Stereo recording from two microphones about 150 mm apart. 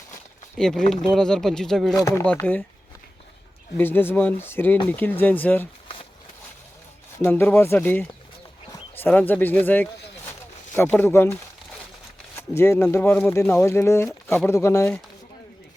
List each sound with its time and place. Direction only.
0.5 s speech: 5° left (ahead or behind)
2.0 s speech: 20° left (ahead or behind)
2.2 s speech: 10° left (ahead or behind)
3.8 s speech: 15° left (ahead or behind)
7.2 s speech: 15° left (ahead or behind)
12.4 s speech: 15° left (ahead or behind)